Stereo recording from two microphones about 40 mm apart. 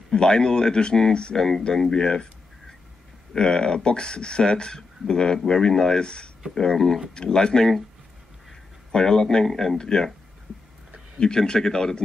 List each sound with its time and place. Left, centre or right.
0.1 s speech: centre
3.3 s speech: centre
8.9 s speech: centre
11.1 s speech: centre